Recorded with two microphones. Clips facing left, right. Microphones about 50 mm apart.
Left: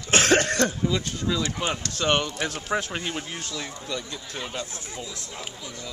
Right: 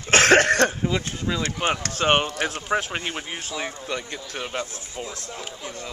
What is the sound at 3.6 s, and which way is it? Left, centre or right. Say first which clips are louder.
Speech: right 3 dB; right.